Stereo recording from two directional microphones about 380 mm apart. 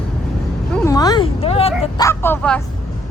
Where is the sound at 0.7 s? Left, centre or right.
Centre.